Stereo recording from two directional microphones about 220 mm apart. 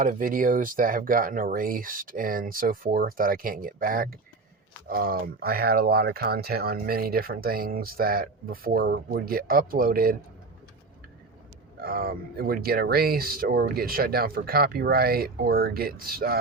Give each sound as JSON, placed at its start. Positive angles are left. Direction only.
{"t": 0.0, "sound": "speech", "side_deg": -40}
{"t": 11.8, "sound": "speech", "side_deg": -40}